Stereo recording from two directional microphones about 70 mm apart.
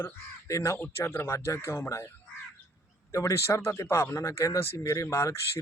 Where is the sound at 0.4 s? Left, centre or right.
Left.